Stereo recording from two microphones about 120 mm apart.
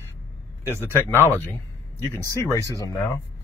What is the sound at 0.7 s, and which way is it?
Speech, 20° right (ahead or behind).